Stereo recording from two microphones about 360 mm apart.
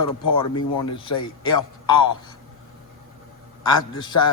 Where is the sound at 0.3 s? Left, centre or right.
Centre.